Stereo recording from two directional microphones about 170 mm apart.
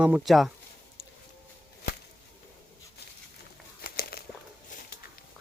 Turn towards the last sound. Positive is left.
turn(degrees=65)  # may be behind; listen again after turning